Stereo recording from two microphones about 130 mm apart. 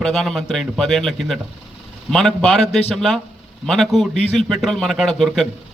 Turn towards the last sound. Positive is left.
turn(degrees=0)  # may be behind; listen again after turning